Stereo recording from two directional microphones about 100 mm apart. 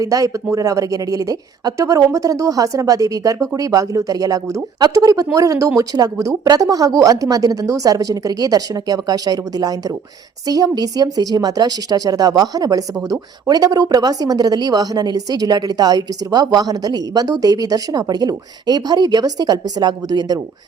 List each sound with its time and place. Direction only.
0.0 s a woman's voice: 35° right (ahead or behind)